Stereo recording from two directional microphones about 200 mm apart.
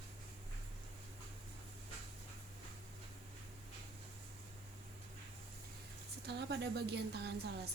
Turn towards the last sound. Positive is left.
turn(degrees=-55)  # may be behind; listen again after turning